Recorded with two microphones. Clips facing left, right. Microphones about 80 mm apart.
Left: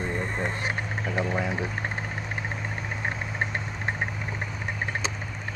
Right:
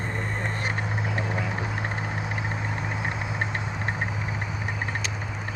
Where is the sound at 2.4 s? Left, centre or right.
Centre.